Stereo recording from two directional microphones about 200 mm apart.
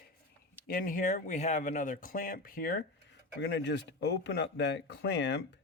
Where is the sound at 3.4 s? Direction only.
60° left (ahead or behind).